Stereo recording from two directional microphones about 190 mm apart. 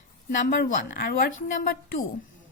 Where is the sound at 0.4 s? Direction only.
50° left (ahead or behind).